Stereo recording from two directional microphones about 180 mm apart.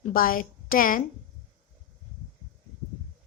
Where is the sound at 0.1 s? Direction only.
50° left (ahead or behind).